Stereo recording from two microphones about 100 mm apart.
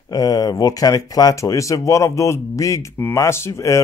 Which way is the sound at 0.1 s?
40° left (ahead or behind).